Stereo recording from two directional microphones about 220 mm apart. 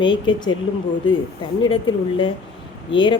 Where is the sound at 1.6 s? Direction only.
20° left (ahead or behind).